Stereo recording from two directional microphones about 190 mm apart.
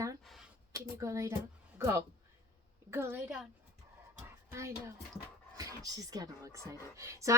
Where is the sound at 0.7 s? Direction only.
15° right (ahead or behind).